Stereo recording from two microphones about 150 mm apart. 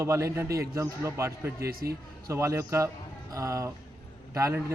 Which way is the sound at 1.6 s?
90° right.